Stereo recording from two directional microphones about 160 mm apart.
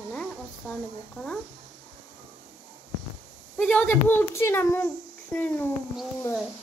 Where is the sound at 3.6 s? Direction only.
10° left (ahead or behind).